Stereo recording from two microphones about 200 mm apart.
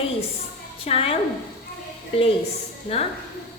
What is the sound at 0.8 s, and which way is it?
Speech, 30° left (ahead or behind).